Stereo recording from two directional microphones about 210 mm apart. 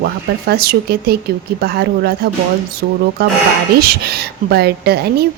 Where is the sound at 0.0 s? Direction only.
50° right (ahead or behind).